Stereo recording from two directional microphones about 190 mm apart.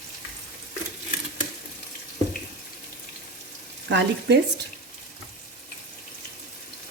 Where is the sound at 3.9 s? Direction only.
65° right (ahead or behind).